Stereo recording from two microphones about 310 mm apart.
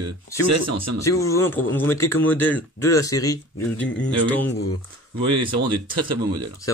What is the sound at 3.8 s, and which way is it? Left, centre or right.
Speech, left.